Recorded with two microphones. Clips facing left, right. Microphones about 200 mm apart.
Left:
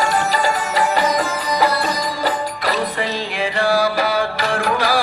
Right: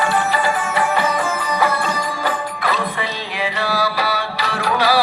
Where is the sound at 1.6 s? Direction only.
35° left (ahead or behind).